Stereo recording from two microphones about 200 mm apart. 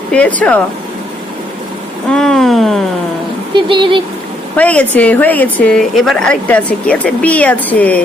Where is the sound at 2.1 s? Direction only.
5° left (ahead or behind).